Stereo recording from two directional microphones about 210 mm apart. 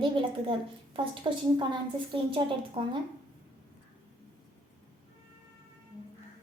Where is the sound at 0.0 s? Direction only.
25° right (ahead or behind).